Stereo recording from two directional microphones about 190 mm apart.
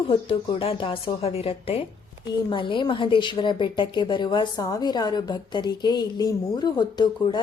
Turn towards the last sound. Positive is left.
turn(degrees=25)  # may be behind; listen again after turning